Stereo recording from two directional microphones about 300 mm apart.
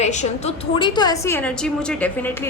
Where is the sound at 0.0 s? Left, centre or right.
Left.